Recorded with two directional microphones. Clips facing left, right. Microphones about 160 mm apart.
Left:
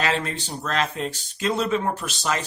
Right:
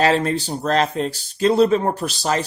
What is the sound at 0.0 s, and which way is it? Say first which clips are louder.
Speech: right 8 dB; 35° right (ahead or behind).